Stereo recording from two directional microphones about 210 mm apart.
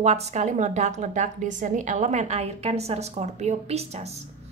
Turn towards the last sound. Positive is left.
turn(degrees=-30)  # may be behind; listen again after turning